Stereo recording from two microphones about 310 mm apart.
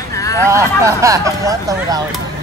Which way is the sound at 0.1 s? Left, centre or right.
Centre.